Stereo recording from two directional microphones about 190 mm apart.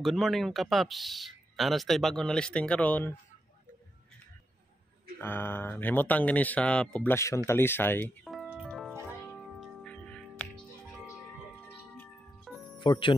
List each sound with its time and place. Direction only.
0.0 s speech: centre (ahead or behind)
5.2 s speech: 10° left (ahead or behind)
9.5 s music: centre (ahead or behind)
12.7 s speech: 25° left (ahead or behind)